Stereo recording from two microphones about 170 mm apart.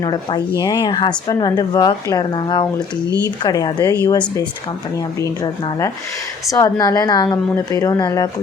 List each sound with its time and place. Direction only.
0.0 s a woman's voice: 25° left (ahead or behind)
6.5 s a woman's voice: 20° left (ahead or behind)